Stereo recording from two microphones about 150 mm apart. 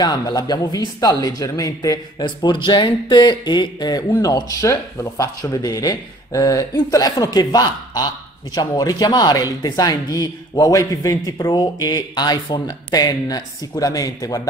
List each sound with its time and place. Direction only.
0.0 s a man's voice: 25° left (ahead or behind)